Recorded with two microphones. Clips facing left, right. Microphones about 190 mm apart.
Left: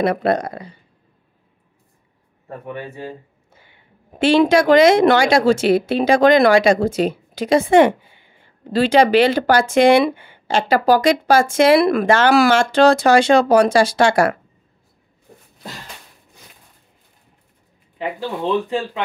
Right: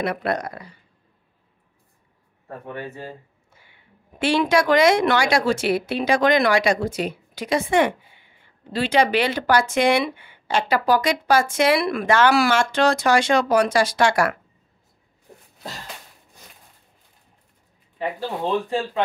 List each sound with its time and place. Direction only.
0.0 s speech: 30° left (ahead or behind)
2.6 s speech: 10° left (ahead or behind)
4.2 s speech: 25° left (ahead or behind)